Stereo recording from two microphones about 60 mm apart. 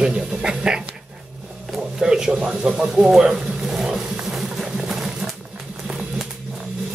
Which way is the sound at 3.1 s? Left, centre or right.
Centre.